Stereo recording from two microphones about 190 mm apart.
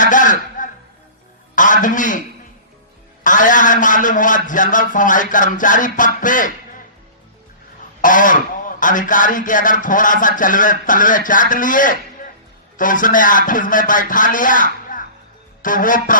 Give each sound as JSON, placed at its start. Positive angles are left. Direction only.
{"t": 0.0, "sound": "a sound", "side_deg": 40}
{"t": 3.2, "sound": "a man's voice", "side_deg": 45}
{"t": 8.0, "sound": "speech", "side_deg": 45}